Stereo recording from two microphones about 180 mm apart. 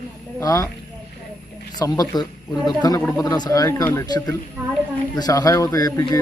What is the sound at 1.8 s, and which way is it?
A man's voice, 20° left (ahead or behind).